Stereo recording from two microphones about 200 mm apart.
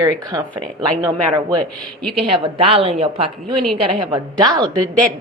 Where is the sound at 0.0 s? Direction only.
20° right (ahead or behind).